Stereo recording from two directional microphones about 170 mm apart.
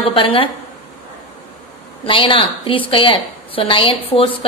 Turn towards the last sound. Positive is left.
turn(degrees=30)  # may be behind; listen again after turning